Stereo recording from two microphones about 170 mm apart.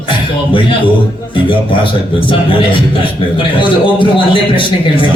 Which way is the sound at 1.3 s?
30° left (ahead or behind).